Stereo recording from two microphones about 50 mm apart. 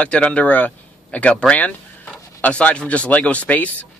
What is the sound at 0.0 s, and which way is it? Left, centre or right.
Speech, left.